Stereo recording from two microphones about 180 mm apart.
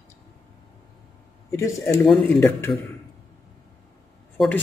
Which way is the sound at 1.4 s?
15° left (ahead or behind).